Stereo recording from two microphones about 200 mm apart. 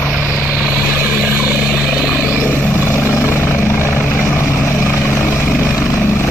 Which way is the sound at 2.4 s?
10° left (ahead or behind).